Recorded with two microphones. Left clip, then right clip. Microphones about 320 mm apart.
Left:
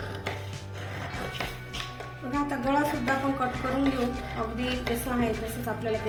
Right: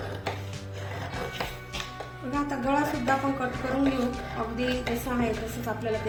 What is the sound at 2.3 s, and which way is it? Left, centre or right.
A woman's voice, centre.